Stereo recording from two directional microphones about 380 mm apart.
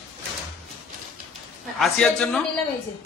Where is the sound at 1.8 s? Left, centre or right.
Centre.